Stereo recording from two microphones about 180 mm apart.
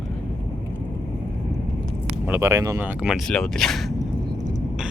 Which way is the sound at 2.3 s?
15° right (ahead or behind).